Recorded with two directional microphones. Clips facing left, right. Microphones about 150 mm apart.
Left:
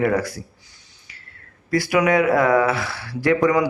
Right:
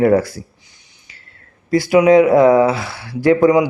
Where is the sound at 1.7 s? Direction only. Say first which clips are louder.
Right 7 dB; 25° right (ahead or behind).